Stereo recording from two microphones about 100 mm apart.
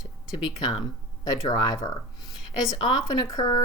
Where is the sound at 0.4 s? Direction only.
45° left (ahead or behind).